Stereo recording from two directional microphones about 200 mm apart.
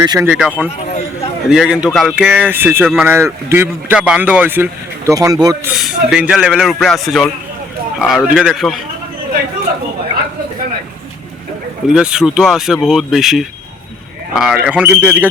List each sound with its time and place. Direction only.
0.0 s speech: 20° right (ahead or behind)
0.3 s speech: 5° right (ahead or behind)
5.7 s speech: centre (ahead or behind)
11.9 s speech: 5° right (ahead or behind)